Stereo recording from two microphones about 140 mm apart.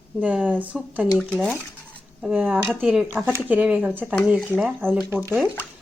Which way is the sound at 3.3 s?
10° right (ahead or behind).